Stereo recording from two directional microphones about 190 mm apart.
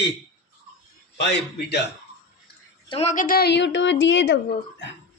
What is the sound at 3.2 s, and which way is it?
A woman's voice, 50° left (ahead or behind).